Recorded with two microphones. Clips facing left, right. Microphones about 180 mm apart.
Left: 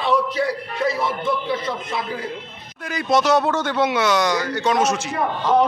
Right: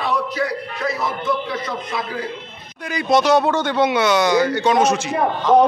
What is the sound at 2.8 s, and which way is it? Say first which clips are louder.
Speech: right 2 dB; centre (ahead or behind).